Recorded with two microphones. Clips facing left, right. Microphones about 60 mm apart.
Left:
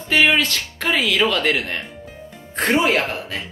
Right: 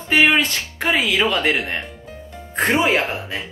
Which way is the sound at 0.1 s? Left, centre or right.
Centre.